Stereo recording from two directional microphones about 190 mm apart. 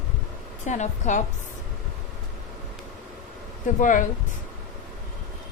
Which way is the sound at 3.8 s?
45° left (ahead or behind).